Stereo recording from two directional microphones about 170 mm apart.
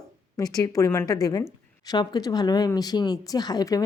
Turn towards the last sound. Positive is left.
turn(degrees=20)  # may be behind; listen again after turning